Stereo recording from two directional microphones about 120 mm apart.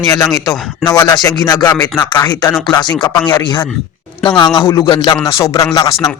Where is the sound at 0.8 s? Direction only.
35° left (ahead or behind).